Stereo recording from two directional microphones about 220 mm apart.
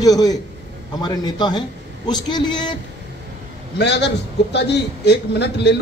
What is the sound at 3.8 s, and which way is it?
A man's voice, 50° left (ahead or behind).